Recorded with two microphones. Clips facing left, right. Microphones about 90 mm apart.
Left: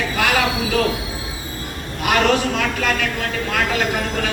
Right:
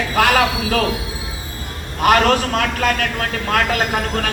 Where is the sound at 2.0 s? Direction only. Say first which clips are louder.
Right 3 dB; 50° right (ahead or behind).